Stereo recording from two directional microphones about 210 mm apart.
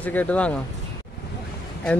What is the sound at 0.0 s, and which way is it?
Speech, 5° left (ahead or behind).